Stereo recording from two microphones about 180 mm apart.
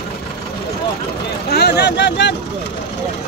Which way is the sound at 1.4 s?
65° left (ahead or behind).